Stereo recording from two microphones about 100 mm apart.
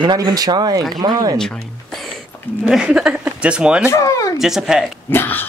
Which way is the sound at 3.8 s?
30° left (ahead or behind).